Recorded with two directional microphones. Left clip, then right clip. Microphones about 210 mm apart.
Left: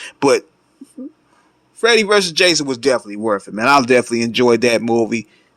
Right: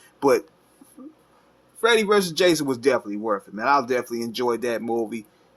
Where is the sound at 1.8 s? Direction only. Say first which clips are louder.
Left 6 dB; 35° left (ahead or behind).